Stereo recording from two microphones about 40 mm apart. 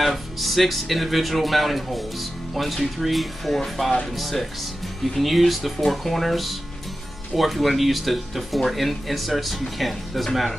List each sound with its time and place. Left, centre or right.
0.0 s speech: centre